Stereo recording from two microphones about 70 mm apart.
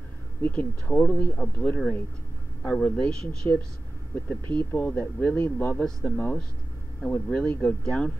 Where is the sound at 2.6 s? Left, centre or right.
Centre.